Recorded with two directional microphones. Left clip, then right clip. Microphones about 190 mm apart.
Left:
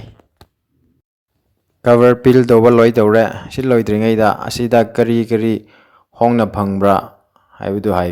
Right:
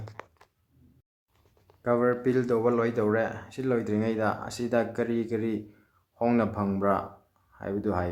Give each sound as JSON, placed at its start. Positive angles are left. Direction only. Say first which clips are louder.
{"t": 1.8, "sound": "a man's voice", "louder": "left 15 dB", "side_deg": 45}